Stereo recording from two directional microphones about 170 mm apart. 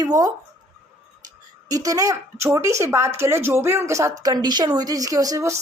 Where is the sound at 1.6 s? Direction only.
20° right (ahead or behind).